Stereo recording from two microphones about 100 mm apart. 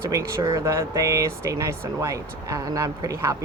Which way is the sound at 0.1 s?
30° right (ahead or behind).